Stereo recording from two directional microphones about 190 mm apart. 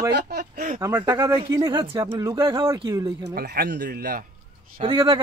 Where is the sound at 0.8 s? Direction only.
15° right (ahead or behind).